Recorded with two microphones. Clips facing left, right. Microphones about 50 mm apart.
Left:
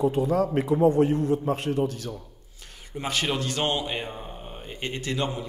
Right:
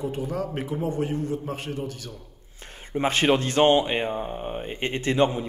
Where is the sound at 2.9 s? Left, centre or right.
Right.